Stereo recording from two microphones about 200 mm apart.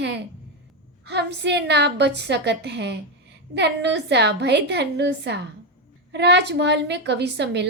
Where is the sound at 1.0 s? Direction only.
55° right (ahead or behind).